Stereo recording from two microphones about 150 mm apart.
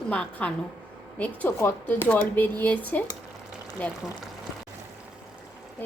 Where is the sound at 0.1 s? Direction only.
5° left (ahead or behind).